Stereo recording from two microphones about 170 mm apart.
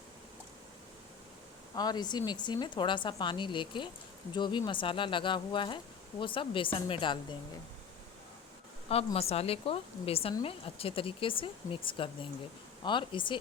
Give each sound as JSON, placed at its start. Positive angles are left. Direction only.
{"t": 1.7, "sound": "speech", "side_deg": 25}
{"t": 9.1, "sound": "speech", "side_deg": 35}